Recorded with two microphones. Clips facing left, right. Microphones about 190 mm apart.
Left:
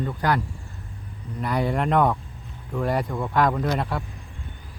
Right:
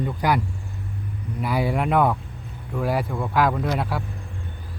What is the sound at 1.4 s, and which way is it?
Speech, 5° right (ahead or behind).